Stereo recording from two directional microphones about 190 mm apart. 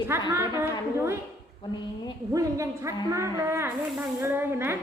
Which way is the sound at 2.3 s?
15° right (ahead or behind).